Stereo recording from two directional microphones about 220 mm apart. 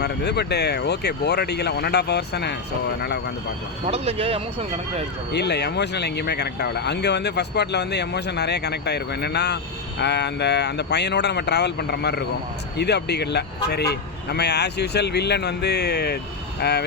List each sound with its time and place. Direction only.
0.0 s speech: 50° left (ahead or behind)
3.8 s speech: 30° right (ahead or behind)
5.3 s speech: 50° left (ahead or behind)